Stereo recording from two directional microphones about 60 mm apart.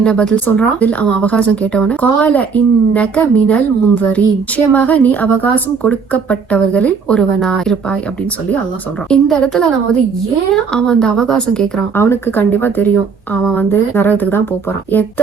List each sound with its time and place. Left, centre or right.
0.0 s a woman's voice: centre
9.2 s a woman's voice: centre
11.9 s speech: left
12.4 s a woman's voice: left